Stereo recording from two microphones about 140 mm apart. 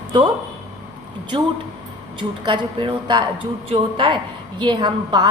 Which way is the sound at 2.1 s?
35° right (ahead or behind).